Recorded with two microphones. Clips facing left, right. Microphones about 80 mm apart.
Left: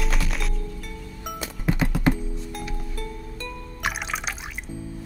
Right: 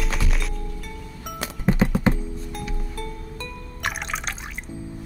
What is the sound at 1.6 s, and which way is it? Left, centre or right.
Music, right.